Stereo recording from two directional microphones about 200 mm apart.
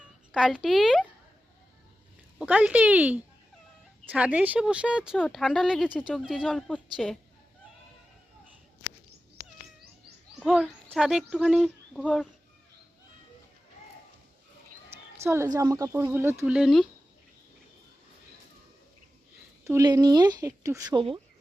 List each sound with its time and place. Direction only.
0.3 s speech: 5° right (ahead or behind)
2.4 s speech: 5° right (ahead or behind)
10.4 s speech: centre (ahead or behind)
15.2 s a woman's voice: 15° right (ahead or behind)
19.6 s speech: 15° right (ahead or behind)